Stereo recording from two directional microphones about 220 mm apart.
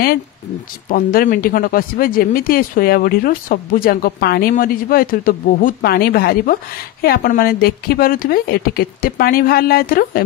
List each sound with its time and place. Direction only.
0.8 s speech: 40° left (ahead or behind)